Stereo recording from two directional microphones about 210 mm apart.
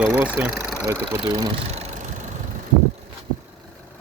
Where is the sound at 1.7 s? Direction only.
30° right (ahead or behind).